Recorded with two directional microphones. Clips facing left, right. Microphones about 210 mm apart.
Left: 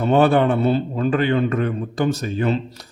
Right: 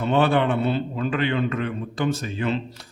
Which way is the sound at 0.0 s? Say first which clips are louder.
Left 4 dB; 40° left (ahead or behind).